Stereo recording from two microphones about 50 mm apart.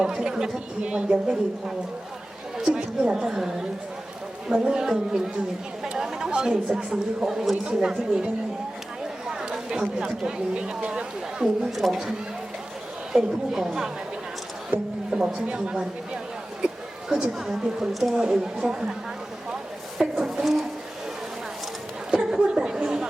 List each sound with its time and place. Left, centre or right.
0.0 s speech: centre
2.6 s a woman's voice: centre
5.9 s chatter: centre
6.9 s speech: centre
9.2 s chatter: centre
10.0 s speech: centre
11.7 s speech: centre
13.1 s speech: centre
15.1 s a woman's voice: centre
20.0 s a sound: centre
22.1 s chatter: centre